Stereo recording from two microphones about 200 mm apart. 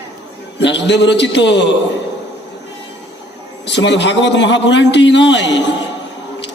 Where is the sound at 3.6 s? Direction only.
60° left (ahead or behind).